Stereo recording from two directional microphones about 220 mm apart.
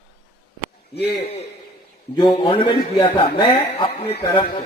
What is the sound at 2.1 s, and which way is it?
A man's voice, 20° left (ahead or behind).